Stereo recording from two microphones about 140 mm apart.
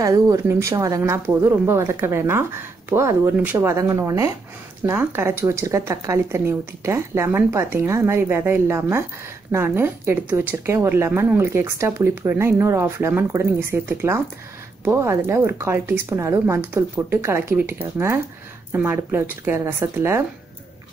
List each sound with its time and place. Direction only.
0.0 s a woman's voice: 25° right (ahead or behind)